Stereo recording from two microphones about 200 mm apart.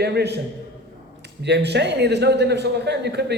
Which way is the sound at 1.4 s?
55° right (ahead or behind).